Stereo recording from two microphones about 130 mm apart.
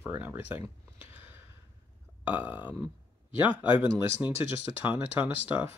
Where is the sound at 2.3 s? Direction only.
10° right (ahead or behind).